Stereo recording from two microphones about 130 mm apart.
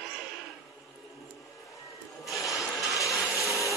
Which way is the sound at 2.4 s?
25° left (ahead or behind).